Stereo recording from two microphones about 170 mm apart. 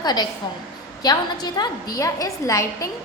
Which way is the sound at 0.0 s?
25° left (ahead or behind).